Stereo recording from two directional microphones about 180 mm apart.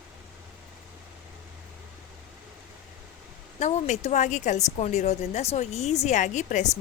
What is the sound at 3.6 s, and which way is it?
A woman's voice, 40° left (ahead or behind).